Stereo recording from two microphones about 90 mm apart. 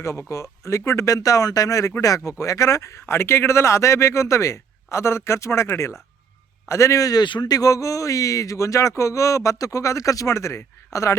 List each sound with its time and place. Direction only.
0.0 s speech: 35° left (ahead or behind)
7.3 s speech: 55° left (ahead or behind); by 11.2 s 35° left (ahead or behind)